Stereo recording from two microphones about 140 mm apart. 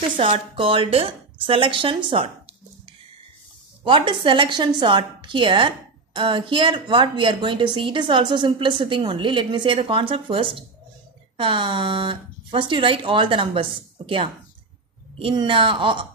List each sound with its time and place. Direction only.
0.2 s a woman's voice: 40° right (ahead or behind)
3.8 s a woman's voice: 35° right (ahead or behind)